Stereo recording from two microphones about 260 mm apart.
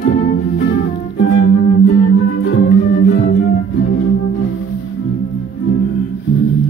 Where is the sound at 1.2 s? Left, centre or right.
Left.